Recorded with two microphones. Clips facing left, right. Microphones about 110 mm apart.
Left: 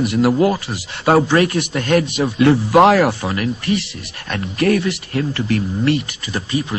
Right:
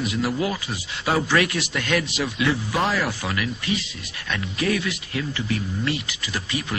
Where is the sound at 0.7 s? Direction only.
55° left (ahead or behind).